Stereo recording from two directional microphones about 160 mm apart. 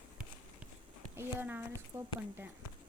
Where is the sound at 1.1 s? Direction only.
15° right (ahead or behind).